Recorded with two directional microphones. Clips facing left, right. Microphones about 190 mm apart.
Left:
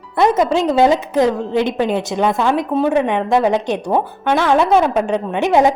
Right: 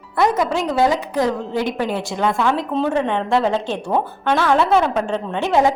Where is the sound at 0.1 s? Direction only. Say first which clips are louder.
Left 4 dB; 20° left (ahead or behind).